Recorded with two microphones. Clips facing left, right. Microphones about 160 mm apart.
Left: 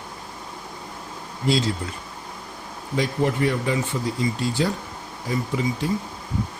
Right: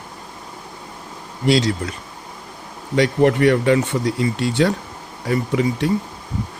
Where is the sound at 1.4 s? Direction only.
75° right (ahead or behind).